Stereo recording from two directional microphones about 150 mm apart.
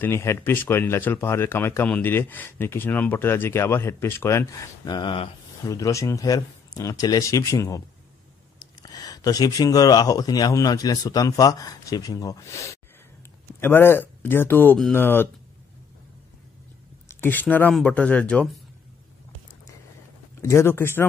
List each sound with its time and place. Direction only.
0.0 s speech: 20° left (ahead or behind); by 5.3 s 35° left (ahead or behind)
5.7 s speech: 20° left (ahead or behind)
8.9 s speech: 25° left (ahead or behind)
17.1 s speech: 15° left (ahead or behind)
20.3 s speech: 15° left (ahead or behind)